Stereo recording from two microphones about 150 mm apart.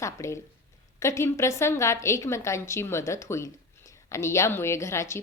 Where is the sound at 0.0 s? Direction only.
20° left (ahead or behind).